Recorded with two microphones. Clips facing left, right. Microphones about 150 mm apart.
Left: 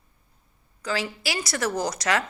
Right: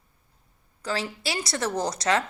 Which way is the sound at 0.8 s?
30° right (ahead or behind).